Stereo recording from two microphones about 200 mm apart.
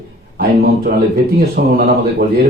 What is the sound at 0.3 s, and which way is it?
Speech, 50° right (ahead or behind).